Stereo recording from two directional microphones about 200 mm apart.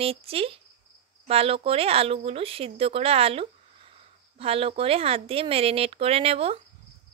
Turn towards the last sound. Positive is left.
turn(degrees=-30)  # may be behind; listen again after turning